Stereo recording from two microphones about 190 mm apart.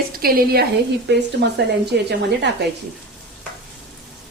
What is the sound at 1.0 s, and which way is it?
Speech, 65° right (ahead or behind).